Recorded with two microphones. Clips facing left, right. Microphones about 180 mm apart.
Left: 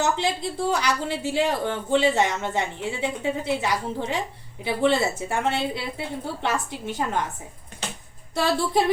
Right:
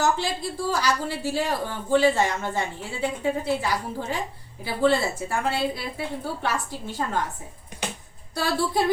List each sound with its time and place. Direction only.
0.0 s a woman's voice: 20° left (ahead or behind)
8.4 s a woman's voice: 20° left (ahead or behind)